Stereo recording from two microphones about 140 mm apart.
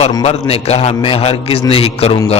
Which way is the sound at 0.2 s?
50° left (ahead or behind).